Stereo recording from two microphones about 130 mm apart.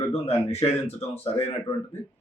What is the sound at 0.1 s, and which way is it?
A man's voice, 50° left (ahead or behind).